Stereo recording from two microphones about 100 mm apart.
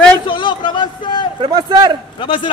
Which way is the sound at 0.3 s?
55° left (ahead or behind).